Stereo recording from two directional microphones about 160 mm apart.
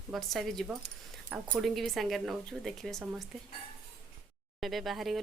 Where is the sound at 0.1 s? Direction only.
Centre (ahead or behind).